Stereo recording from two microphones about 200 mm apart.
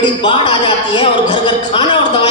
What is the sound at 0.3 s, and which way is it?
A man's voice, 25° left (ahead or behind).